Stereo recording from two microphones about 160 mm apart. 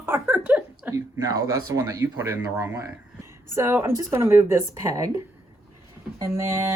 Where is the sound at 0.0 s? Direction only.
10° right (ahead or behind).